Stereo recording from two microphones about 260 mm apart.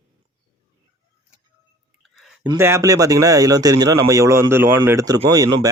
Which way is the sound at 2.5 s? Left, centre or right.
Centre.